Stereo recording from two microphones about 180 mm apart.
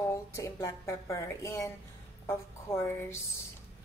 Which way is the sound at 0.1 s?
15° left (ahead or behind).